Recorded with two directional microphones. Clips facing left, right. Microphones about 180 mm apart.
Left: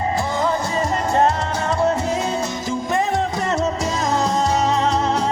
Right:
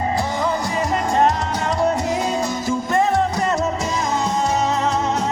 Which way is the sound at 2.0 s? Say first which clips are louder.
Right 1 dB; 25° left (ahead or behind).